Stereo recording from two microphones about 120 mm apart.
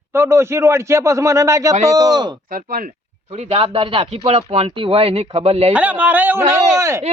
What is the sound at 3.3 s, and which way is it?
Speech, 55° right (ahead or behind).